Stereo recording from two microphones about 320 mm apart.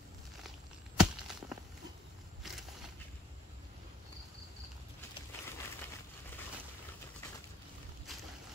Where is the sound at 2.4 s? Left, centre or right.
Centre.